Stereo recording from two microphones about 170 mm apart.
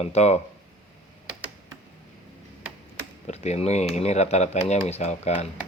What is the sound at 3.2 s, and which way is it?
Speech, 40° left (ahead or behind).